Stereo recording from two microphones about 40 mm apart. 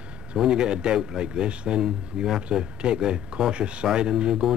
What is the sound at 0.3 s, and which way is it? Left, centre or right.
Speech, right.